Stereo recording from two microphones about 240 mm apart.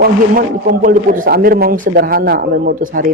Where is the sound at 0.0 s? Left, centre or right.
Right.